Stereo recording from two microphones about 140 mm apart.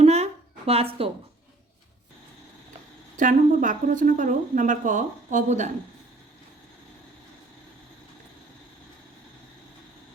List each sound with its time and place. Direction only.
0.0 s a sound: 50° right (ahead or behind)
0.7 s speech: 45° right (ahead or behind)
3.2 s speech: 65° right (ahead or behind)